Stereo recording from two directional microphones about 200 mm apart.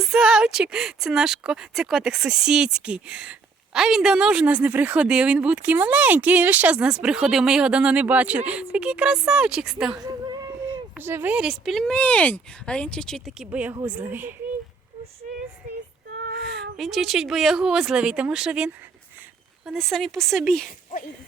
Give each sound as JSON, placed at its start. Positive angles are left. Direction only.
{"t": 0.0, "sound": "speech", "side_deg": -5}
{"t": 10.1, "sound": "a sound", "side_deg": -20}
{"t": 10.7, "sound": "a woman's voice", "side_deg": -10}
{"t": 15.2, "sound": "female singing", "side_deg": -40}
{"t": 15.6, "sound": "child singing", "side_deg": -45}
{"t": 16.1, "sound": "child singing", "side_deg": -60}
{"t": 16.7, "sound": "speech", "side_deg": 0}